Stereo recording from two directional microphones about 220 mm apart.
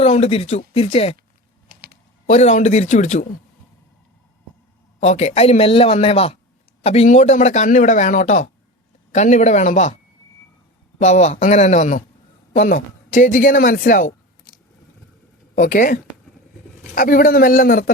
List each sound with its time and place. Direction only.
0.0 s speech: 30° left (ahead or behind)
1.7 s typing: 45° right (ahead or behind)
2.2 s speech: 30° left (ahead or behind)
5.0 s speech: 30° left (ahead or behind)
10.9 s speech: 30° left (ahead or behind)
15.5 s speech: 35° left (ahead or behind)